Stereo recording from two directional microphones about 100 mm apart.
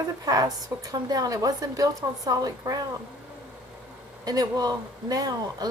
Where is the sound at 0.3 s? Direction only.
40° right (ahead or behind).